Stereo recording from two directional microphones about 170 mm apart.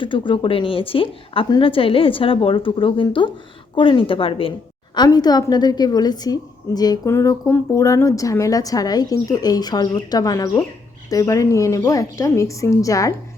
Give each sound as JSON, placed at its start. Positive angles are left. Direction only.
{"t": 0.0, "sound": "a woman's voice", "side_deg": 30}